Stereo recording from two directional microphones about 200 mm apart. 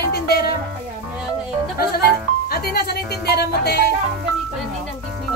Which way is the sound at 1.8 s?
50° left (ahead or behind).